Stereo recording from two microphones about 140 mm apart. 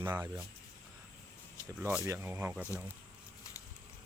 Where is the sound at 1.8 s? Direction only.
15° right (ahead or behind).